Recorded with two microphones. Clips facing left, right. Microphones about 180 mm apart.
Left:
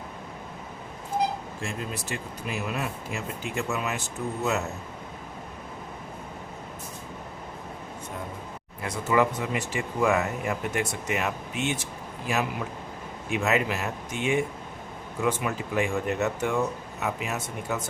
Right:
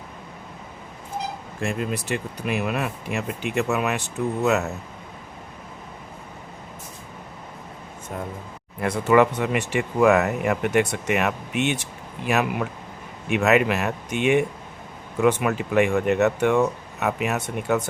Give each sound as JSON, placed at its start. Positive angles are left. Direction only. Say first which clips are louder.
{"t": 1.6, "sound": "speech", "louder": "right 9 dB", "side_deg": -65}
{"t": 8.8, "sound": "speech", "louder": "right 6 dB", "side_deg": -65}